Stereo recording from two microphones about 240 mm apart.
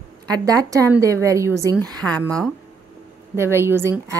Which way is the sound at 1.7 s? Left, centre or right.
Centre.